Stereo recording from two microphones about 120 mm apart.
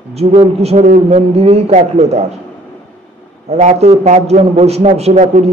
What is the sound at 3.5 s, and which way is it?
A man's voice, 70° right (ahead or behind).